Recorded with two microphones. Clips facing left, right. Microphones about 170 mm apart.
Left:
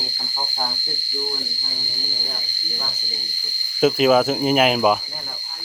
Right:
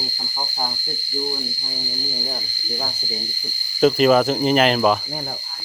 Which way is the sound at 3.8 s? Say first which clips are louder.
Right 1 dB; 5° left (ahead or behind).